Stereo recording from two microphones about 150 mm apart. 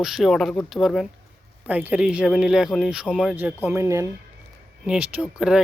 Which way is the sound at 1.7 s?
10° right (ahead or behind).